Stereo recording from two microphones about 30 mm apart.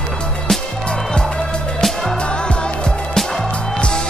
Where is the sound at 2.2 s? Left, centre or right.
Left.